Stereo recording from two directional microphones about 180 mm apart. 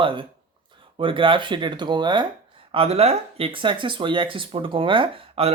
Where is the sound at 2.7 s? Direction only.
35° right (ahead or behind).